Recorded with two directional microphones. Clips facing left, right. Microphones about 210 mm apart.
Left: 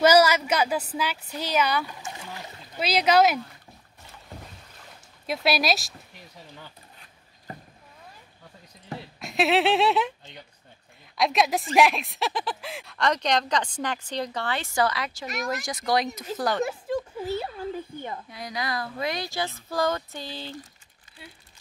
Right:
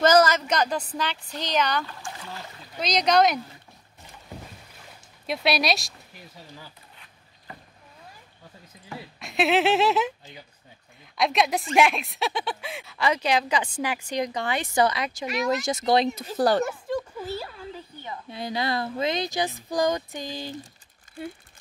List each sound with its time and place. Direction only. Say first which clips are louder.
0.0 s a woman's voice: even; 10° left (ahead or behind)
5.2 s speech: even; centre (ahead or behind)
9.2 s speech: even; centre (ahead or behind); by 16.6 s 30° right (ahead or behind)
18.3 s speech: right 6 dB; 25° right (ahead or behind)